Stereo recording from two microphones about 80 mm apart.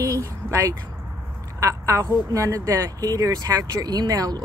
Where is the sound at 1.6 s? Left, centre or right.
Right.